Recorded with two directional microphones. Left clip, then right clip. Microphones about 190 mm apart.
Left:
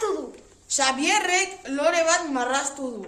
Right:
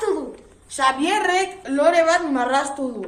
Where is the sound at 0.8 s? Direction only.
55° left (ahead or behind).